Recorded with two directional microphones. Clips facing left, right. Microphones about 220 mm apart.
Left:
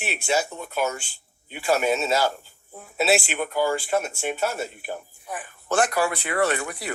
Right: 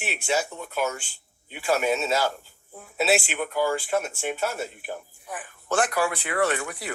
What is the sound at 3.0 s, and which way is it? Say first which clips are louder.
Speech: left 1 dB; 40° left (ahead or behind).